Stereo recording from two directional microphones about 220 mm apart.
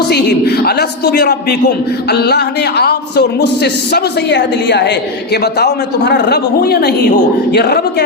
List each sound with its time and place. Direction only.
0.1 s a man's voice: 50° left (ahead or behind)